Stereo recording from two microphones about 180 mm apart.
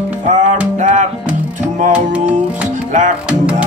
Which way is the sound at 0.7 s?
40° right (ahead or behind).